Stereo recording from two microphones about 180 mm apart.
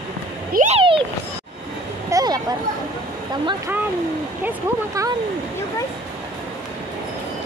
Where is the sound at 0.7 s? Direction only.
30° right (ahead or behind).